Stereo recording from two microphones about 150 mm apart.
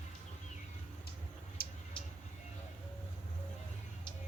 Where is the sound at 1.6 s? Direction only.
80° left.